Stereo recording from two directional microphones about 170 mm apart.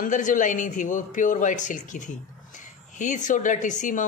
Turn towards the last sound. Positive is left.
turn(degrees=50)  # may be behind; listen again after turning